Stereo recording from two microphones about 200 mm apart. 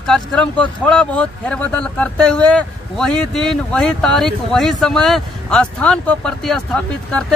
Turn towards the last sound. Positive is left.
turn(degrees=5)  # may be behind; listen again after turning